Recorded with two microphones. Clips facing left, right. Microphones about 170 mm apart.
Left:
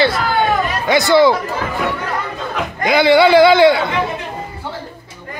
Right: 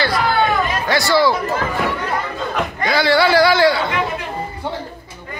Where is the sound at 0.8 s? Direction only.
20° left (ahead or behind).